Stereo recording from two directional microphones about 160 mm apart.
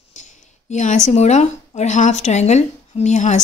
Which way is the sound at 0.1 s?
50° left (ahead or behind).